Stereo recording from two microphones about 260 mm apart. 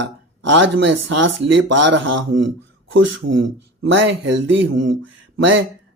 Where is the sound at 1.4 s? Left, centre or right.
Right.